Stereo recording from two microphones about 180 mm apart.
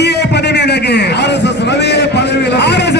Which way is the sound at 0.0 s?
70° left (ahead or behind).